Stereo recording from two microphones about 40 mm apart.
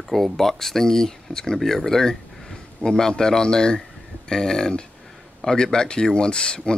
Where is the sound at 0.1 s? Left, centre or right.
Centre.